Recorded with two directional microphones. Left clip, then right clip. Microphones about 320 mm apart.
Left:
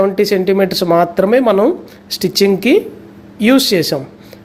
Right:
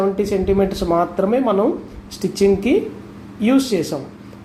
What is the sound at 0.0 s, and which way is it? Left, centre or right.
Speech, left.